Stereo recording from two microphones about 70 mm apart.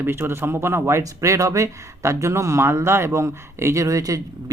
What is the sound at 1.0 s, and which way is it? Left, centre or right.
Speech, right.